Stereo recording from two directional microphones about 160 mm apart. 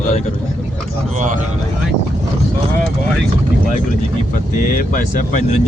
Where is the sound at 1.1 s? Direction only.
50° right (ahead or behind).